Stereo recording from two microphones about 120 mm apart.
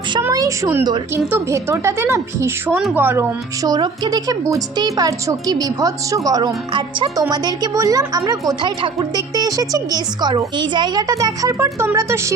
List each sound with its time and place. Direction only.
0.2 s speech: 25° right (ahead or behind)
3.6 s a woman's voice: 35° right (ahead or behind)